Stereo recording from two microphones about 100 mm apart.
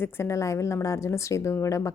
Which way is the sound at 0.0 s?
25° left (ahead or behind).